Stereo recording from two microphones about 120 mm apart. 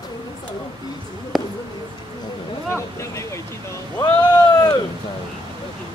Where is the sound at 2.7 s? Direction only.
25° left (ahead or behind).